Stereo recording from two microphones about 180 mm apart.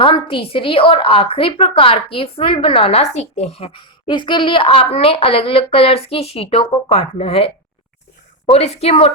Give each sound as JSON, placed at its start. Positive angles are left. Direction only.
{"t": 0.0, "sound": "a woman's voice", "side_deg": 30}